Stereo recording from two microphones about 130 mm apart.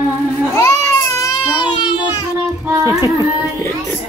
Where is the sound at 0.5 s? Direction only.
25° left (ahead or behind).